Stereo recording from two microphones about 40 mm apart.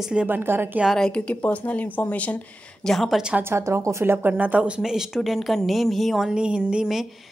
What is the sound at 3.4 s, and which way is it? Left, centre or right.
Speech, right.